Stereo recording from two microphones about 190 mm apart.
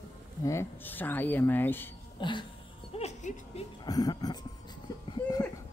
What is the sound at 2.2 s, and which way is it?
Speech, 25° left (ahead or behind).